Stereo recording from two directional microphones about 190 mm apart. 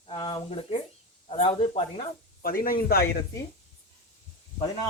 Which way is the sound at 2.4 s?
50° left (ahead or behind).